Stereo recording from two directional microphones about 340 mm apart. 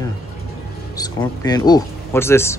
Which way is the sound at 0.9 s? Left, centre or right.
Centre.